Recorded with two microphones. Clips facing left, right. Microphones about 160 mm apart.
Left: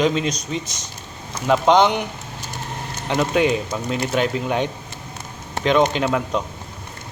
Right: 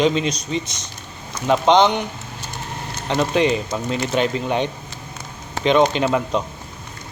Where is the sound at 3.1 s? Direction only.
5° left (ahead or behind).